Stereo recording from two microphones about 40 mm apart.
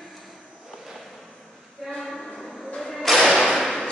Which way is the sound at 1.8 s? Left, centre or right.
Centre.